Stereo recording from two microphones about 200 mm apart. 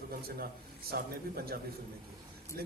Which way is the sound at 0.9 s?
50° right (ahead or behind).